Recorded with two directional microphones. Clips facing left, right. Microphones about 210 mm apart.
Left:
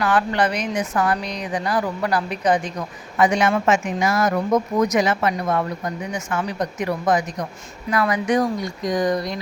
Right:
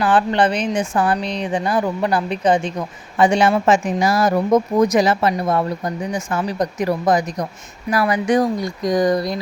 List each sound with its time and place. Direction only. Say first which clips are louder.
0.0 s a woman's voice: right 3 dB; 30° right (ahead or behind)